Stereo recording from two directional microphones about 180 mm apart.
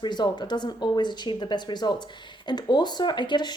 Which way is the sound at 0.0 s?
25° left (ahead or behind).